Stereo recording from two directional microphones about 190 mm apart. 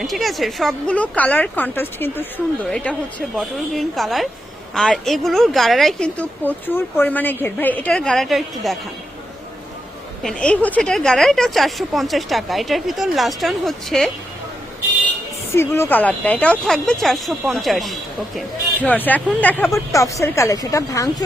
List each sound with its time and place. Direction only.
0.0 s speech: centre (ahead or behind)
10.2 s speech: 5° left (ahead or behind)
15.5 s speech: 15° left (ahead or behind)